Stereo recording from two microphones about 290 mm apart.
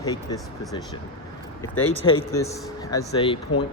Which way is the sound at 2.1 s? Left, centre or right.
Centre.